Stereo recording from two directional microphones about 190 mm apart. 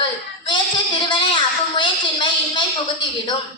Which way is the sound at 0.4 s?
25° left (ahead or behind).